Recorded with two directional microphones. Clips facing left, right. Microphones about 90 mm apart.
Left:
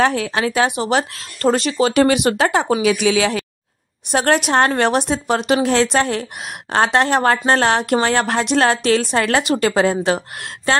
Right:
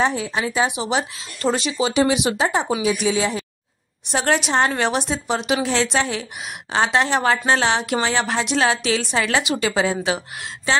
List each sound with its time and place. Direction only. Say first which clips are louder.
0.0 s speech: left 4 dB; 70° left (ahead or behind)
2.8 s speech: left 4 dB; 75° left (ahead or behind)
4.1 s a woman's voice: left 4 dB; 55° left (ahead or behind)